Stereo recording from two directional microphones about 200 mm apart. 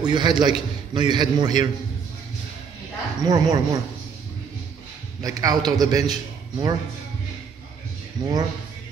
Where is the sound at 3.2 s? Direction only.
20° right (ahead or behind).